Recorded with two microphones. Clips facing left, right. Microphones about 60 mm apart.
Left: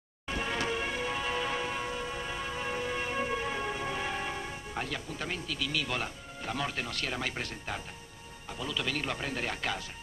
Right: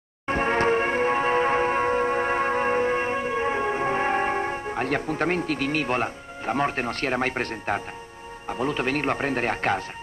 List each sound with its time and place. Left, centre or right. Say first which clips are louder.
0.3 s music: right 11 dB; right
8.5 s speech: right 10 dB; right